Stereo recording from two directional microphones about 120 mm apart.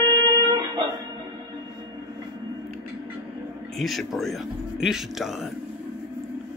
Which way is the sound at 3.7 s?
Centre (ahead or behind).